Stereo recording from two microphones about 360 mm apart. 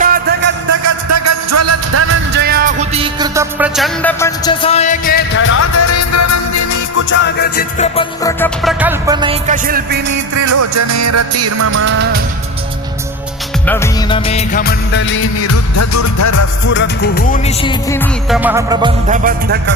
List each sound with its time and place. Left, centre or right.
0.0 s music: right
0.7 s music: right; by 6.8 s left
7.1 s music: left; by 10.0 s right
10.1 s music: right
13.7 s music of bollywood: centre; by 16.5 s left
16.6 s music: left; by 19.7 s right